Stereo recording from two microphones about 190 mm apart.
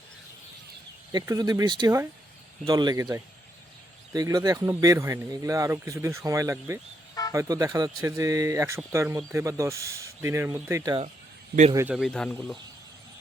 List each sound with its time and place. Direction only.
1.1 s speech: 20° right (ahead or behind)
11.9 s speech: centre (ahead or behind)